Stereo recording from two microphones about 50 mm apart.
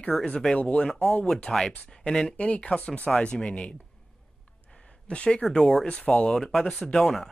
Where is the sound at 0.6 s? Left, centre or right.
Left.